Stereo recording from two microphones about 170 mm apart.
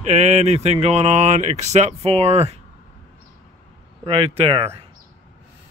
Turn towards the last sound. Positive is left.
turn(degrees=-35)  # may be behind; listen again after turning